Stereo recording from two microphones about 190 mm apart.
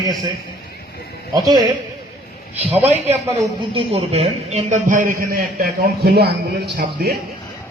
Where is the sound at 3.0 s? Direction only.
15° right (ahead or behind).